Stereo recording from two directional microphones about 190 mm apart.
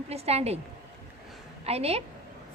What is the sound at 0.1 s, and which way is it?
Speech, 35° right (ahead or behind).